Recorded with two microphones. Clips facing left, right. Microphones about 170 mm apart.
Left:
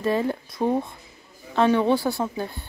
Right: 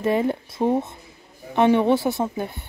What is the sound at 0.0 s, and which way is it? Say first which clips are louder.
A woman's voice: right 2 dB; 20° right (ahead or behind).